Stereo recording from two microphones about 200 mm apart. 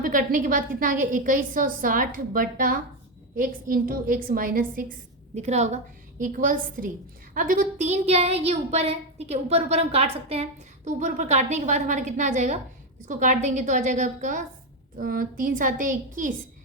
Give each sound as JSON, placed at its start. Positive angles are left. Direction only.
{"t": 0.0, "sound": "a woman's voice", "side_deg": -45}